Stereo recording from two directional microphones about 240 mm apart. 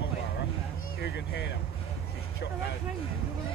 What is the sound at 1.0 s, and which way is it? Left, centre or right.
Speech, left.